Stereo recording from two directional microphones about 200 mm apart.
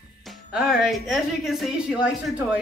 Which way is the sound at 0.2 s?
Centre (ahead or behind).